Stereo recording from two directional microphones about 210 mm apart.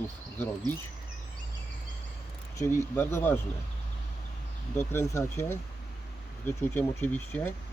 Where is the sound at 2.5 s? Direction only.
10° left (ahead or behind).